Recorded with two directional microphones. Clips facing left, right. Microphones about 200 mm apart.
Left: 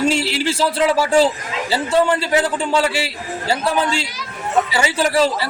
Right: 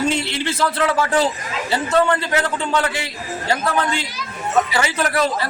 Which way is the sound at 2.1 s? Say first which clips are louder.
Left 3 dB; 30° left (ahead or behind).